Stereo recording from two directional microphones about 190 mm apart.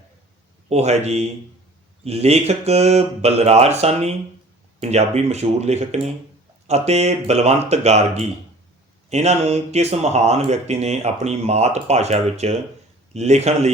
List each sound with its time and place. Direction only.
0.7 s speech: 35° right (ahead or behind)